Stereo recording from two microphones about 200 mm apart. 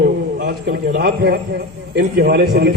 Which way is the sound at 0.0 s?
50° right (ahead or behind).